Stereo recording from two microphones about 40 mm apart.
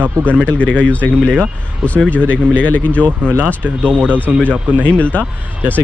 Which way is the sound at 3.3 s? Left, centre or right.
Right.